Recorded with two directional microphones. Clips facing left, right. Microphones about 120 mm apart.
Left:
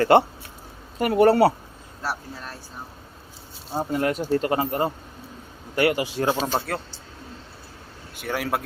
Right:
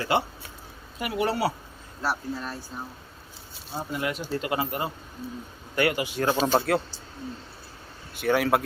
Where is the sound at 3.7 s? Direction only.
45° left (ahead or behind).